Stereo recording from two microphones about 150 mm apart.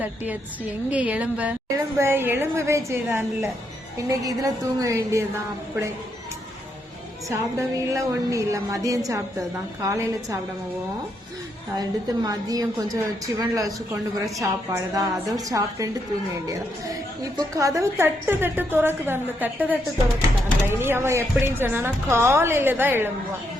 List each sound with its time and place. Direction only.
0.9 s a woman's voice: 10° right (ahead or behind)
7.3 s a woman's voice: 20° right (ahead or behind)
11.7 s a woman's voice: 25° right (ahead or behind)
17.3 s a woman's voice: 20° right (ahead or behind)